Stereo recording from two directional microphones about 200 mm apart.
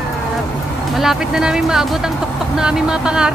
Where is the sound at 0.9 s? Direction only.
Centre (ahead or behind).